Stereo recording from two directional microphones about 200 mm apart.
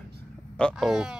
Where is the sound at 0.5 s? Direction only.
Centre (ahead or behind).